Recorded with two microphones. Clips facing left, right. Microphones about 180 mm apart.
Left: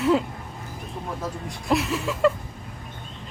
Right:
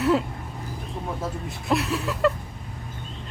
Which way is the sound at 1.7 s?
Centre (ahead or behind).